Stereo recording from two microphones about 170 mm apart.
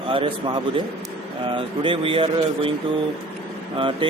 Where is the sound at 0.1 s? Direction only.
30° right (ahead or behind).